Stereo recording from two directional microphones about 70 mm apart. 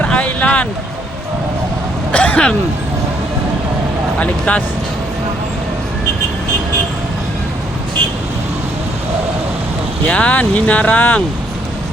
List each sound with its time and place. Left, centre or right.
0.0 s a sound: centre
2.1 s throat clearing: centre
4.2 s speech: centre
10.1 s speech: centre